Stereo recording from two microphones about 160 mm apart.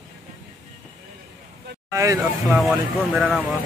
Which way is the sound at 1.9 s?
20° right (ahead or behind).